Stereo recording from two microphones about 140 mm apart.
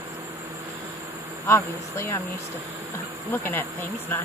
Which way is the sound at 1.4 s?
15° left (ahead or behind).